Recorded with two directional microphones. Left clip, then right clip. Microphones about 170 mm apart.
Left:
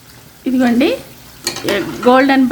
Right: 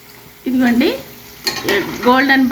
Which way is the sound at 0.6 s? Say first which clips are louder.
Left 1 dB; 70° left (ahead or behind).